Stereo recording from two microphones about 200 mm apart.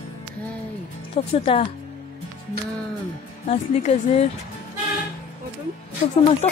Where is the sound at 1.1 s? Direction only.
30° left (ahead or behind).